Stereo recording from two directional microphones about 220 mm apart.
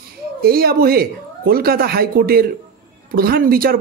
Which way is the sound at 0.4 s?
45° right (ahead or behind).